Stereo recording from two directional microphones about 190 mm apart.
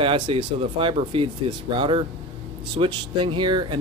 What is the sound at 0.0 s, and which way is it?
Speech, 30° right (ahead or behind).